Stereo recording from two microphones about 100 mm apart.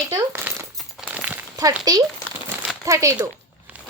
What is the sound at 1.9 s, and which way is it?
A child's voice, 40° right (ahead or behind).